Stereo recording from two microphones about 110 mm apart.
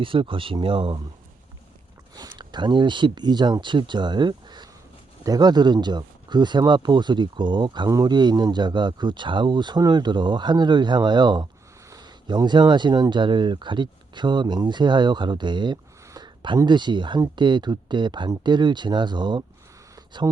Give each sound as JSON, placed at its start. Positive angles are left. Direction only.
{"t": 0.0, "sound": "speech", "side_deg": -50}
{"t": 2.1, "sound": "speech", "side_deg": -40}